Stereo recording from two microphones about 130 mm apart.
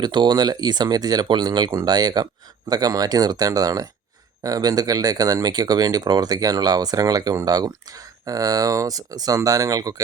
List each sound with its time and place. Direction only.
0.0 s speech: 35° right (ahead or behind)